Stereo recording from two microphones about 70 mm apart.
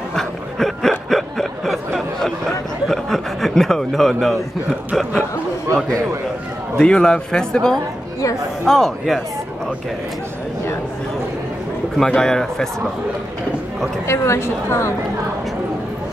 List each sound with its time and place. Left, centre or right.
0.1 s a sound: centre
6.8 s a man's voice: centre
12.0 s speech: centre
14.0 s a woman's voice: left